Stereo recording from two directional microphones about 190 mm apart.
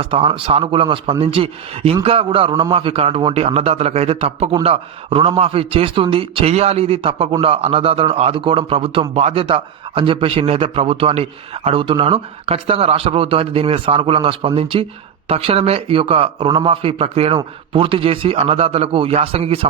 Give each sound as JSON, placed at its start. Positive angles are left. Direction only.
{"t": 0.0, "sound": "a man's voice", "side_deg": -30}